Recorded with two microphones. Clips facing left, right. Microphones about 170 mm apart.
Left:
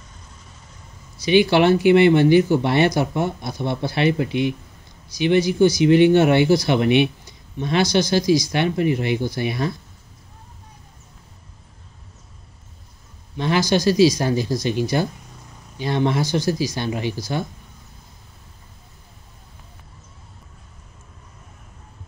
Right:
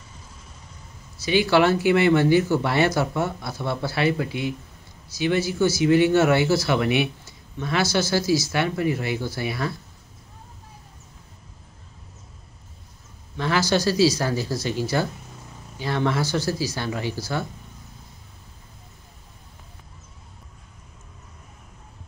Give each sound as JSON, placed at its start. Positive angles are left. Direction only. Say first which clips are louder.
{"t": 1.2, "sound": "speech", "louder": "left 3 dB", "side_deg": 20}
{"t": 13.4, "sound": "speech", "louder": "left 3 dB", "side_deg": 15}